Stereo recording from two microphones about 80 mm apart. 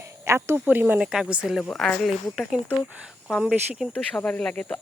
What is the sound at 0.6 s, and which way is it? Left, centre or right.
Speech, centre.